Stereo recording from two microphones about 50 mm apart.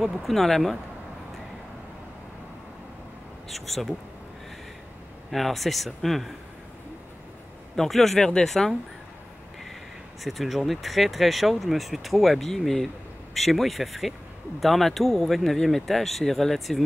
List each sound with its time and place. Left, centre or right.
0.0 s speech: centre
3.4 s speech: centre
5.3 s speech: centre
7.7 s speech: centre
8.2 s speech: centre
8.5 s speech: centre
10.2 s speech: centre